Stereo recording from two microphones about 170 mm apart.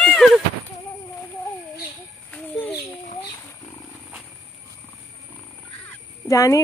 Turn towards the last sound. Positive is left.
turn(degrees=20)  # may be behind; listen again after turning